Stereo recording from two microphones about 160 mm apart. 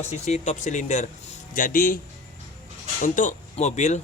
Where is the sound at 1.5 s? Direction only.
60° left (ahead or behind).